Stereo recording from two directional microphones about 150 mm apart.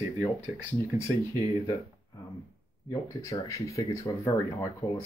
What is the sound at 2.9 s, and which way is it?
Speech, 20° left (ahead or behind).